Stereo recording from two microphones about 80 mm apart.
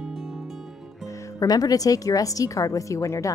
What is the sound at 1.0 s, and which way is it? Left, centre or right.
Speech, left.